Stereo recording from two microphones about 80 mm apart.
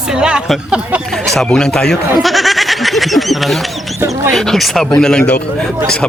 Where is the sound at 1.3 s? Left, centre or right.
Centre.